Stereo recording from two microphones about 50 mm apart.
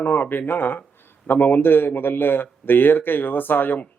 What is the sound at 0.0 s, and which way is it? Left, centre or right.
A man's voice, left.